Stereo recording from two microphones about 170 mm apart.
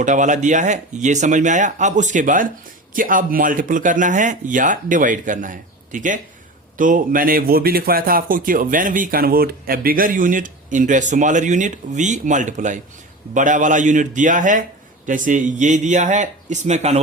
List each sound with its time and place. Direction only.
0.0 s speech: 45° right (ahead or behind)